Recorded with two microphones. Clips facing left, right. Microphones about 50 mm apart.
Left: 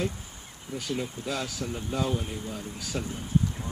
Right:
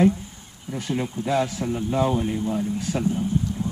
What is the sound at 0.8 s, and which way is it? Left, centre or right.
Speech, right.